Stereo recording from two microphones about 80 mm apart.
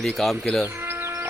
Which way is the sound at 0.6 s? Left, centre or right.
Right.